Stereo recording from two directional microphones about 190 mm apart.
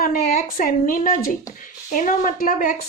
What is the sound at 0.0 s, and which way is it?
A woman's voice, 45° left (ahead or behind).